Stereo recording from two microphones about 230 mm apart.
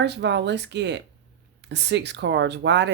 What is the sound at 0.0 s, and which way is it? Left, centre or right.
Speech, right.